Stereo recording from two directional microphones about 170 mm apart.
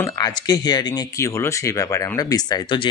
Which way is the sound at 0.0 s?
25° left (ahead or behind).